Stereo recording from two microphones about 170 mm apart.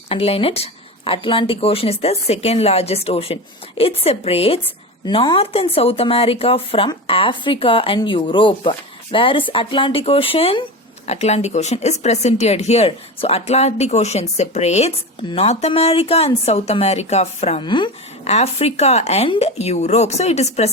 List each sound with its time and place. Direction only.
0.1 s speech: 35° left (ahead or behind)
17.6 s speech: 30° left (ahead or behind)
18.3 s speech: 40° left (ahead or behind)